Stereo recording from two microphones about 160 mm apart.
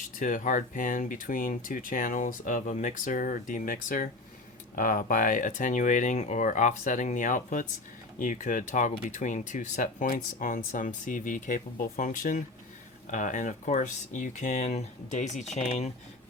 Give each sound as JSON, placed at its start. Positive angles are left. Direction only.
{"t": 0.2, "sound": "speech", "side_deg": 55}